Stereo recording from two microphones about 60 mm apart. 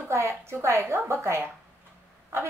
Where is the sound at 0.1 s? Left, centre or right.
Right.